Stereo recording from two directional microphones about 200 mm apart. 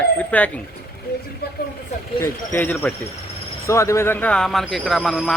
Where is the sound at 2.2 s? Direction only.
10° left (ahead or behind).